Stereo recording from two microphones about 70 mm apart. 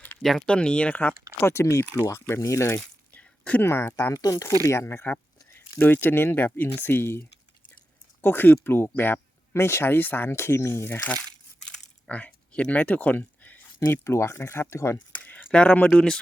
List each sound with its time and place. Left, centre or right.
0.2 s speech: centre
0.4 s speech: centre
1.3 s speech: left
2.7 s a sound: left
3.6 s speech: left
4.1 s speech: left
4.7 s speech: left
11.0 s speech: left
13.8 s speech: left
15.1 s a sound: left
15.5 s speech: centre